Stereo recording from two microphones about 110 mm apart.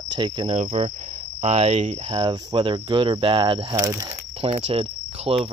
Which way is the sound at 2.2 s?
40° right (ahead or behind).